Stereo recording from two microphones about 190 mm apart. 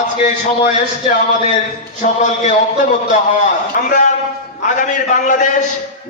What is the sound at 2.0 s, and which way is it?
A man's voice, 40° left (ahead or behind).